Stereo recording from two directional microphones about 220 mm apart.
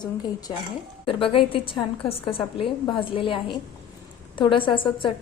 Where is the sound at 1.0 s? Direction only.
25° left (ahead or behind).